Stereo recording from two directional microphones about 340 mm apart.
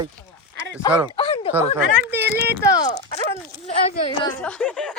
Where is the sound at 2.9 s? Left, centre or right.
Centre.